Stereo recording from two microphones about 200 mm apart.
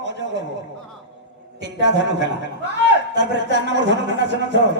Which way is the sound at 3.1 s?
60° right (ahead or behind).